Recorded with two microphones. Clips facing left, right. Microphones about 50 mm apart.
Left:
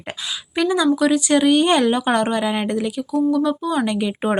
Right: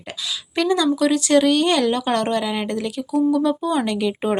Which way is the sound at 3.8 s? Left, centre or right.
Centre.